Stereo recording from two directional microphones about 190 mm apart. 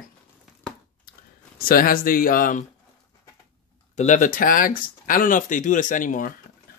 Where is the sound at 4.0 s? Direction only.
40° left (ahead or behind).